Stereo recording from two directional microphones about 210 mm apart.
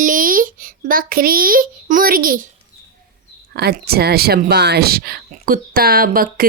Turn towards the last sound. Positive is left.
turn(degrees=-45)  # may be behind; listen again after turning